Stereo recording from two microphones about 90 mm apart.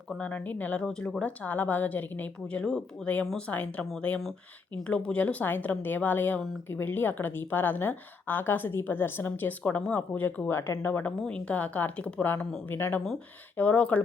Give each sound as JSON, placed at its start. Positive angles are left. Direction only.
{"t": 0.2, "sound": "a woman's voice", "side_deg": 20}
{"t": 10.5, "sound": "a woman's voice", "side_deg": 30}
{"t": 11.2, "sound": "a woman's voice", "side_deg": 10}